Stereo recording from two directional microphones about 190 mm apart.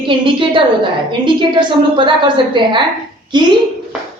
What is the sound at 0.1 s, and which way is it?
A man's voice, 25° right (ahead or behind).